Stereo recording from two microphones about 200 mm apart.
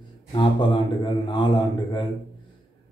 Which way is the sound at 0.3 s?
25° left (ahead or behind).